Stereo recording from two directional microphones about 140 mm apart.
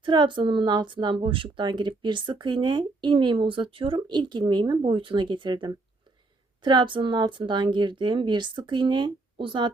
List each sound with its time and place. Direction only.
0.0 s a woman's voice: 35° right (ahead or behind)